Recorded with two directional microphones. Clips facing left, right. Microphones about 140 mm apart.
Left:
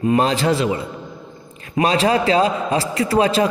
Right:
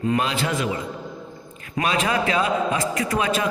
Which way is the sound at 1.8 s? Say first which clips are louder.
Left 6 dB; 35° left (ahead or behind).